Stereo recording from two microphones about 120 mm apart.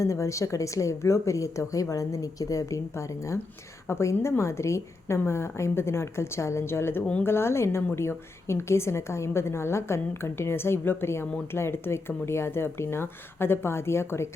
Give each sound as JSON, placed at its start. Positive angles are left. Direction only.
{"t": 0.0, "sound": "a woman's voice", "side_deg": 25}